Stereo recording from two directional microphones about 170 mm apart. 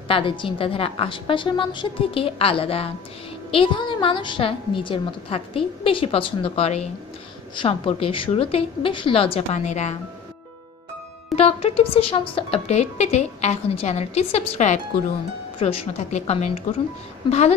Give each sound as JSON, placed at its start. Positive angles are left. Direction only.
{"t": 0.1, "sound": "a woman's voice", "side_deg": 30}
{"t": 11.3, "sound": "a woman's voice", "side_deg": 35}